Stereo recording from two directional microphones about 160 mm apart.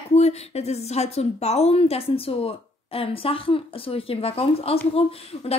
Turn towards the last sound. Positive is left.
turn(degrees=35)  # may be behind; listen again after turning